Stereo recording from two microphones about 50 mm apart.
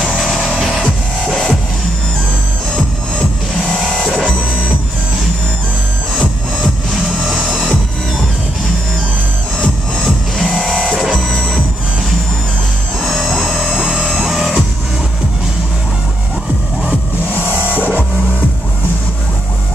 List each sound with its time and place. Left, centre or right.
0.3 s music: centre
3.8 s music: centre
7.4 s music: centre
10.4 s music: centre
13.0 s music: centre
17.7 s music: left